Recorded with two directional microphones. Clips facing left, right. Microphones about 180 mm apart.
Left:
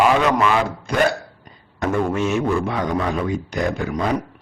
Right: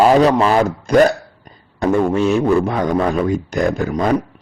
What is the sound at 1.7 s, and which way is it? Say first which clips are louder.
A man's voice: right 5 dB; 30° right (ahead or behind).